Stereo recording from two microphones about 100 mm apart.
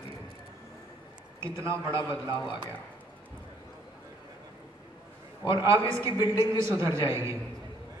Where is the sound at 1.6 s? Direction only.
25° right (ahead or behind).